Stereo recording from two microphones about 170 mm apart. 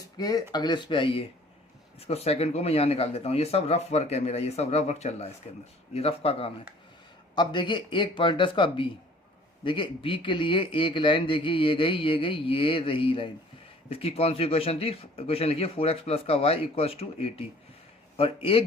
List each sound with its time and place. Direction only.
0.2 s speech: 25° left (ahead or behind)